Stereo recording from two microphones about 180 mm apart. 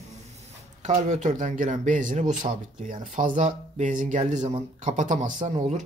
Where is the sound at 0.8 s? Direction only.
40° right (ahead or behind).